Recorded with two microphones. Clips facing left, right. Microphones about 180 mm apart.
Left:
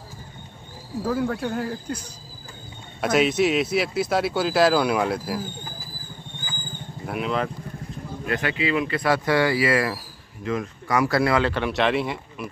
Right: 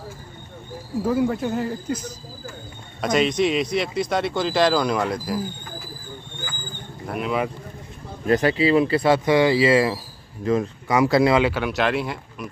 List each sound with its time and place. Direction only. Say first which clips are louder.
1.0 s speech: right 3 dB; 5° right (ahead or behind)
3.0 s speech: even; 5° left (ahead or behind)
7.1 s speech: right 1 dB; centre (ahead or behind)
8.3 s speech: right 7 dB; 35° right (ahead or behind)
10.9 s speech: right 3 dB; 20° right (ahead or behind)
11.5 s speech: even; centre (ahead or behind)